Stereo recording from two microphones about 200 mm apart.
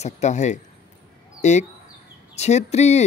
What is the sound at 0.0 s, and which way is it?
Speech, 35° left (ahead or behind).